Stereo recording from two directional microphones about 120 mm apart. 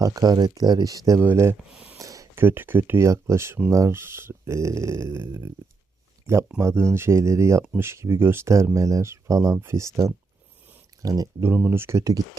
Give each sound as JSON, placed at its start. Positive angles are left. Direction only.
{"t": 0.0, "sound": "speech", "side_deg": -30}